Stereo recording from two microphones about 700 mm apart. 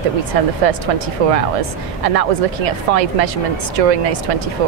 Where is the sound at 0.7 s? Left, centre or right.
Right.